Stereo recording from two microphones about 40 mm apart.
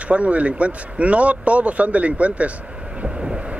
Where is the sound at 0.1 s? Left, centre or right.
Right.